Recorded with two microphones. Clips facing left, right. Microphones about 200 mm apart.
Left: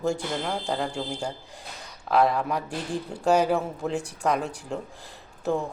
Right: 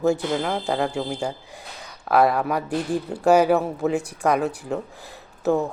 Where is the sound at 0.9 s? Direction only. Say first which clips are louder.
Right 5 dB; 5° right (ahead or behind).